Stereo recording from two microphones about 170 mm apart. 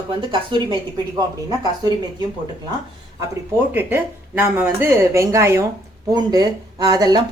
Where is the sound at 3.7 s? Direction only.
10° right (ahead or behind).